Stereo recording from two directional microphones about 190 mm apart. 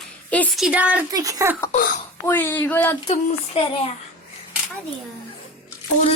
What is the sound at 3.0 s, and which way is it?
Speech, 30° left (ahead or behind).